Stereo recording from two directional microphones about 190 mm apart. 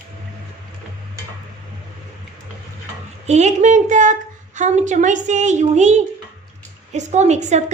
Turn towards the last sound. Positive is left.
turn(degrees=-35)  # may be behind; listen again after turning